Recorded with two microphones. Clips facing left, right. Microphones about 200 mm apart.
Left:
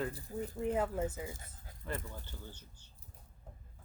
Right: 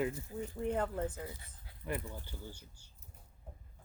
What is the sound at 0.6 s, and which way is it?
Speech, 5° left (ahead or behind).